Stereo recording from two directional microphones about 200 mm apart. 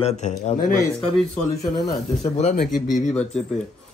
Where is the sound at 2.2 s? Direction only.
35° left (ahead or behind).